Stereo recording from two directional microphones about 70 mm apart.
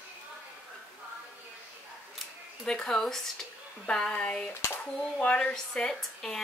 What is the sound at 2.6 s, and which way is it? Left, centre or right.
A woman's voice, centre.